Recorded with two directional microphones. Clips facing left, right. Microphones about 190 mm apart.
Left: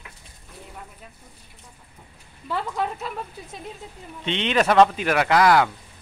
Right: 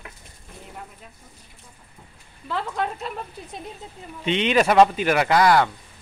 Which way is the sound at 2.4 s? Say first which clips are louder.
Even; 5° left (ahead or behind).